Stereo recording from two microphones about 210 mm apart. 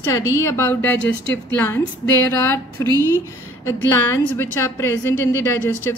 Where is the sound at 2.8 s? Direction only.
15° left (ahead or behind).